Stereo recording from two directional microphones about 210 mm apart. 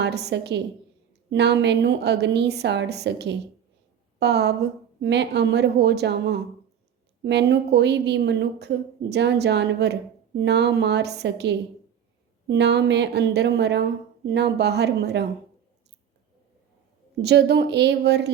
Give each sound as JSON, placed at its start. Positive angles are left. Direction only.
{"t": 0.0, "sound": "a woman's voice", "side_deg": -50}
{"t": 17.2, "sound": "a woman's voice", "side_deg": -55}